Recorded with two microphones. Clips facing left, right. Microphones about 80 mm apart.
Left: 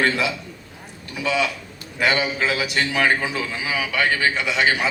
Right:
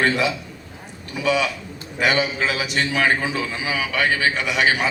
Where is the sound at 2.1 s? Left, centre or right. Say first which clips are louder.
Right 1 dB; centre.